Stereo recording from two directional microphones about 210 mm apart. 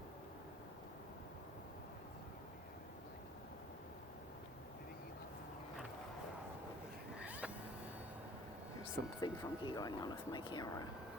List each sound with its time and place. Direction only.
7.2 s vehicle: 5° right (ahead or behind)
9.2 s speech: 20° left (ahead or behind)